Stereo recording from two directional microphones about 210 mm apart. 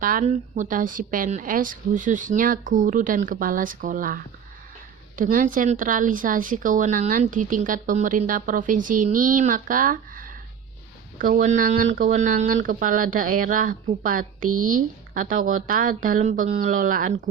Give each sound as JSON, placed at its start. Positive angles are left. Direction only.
{"t": 0.0, "sound": "a woman's voice", "side_deg": -40}